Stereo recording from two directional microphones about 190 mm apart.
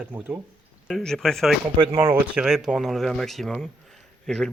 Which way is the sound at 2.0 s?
10° right (ahead or behind).